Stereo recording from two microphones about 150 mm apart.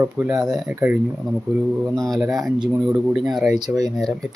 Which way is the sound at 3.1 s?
5° right (ahead or behind).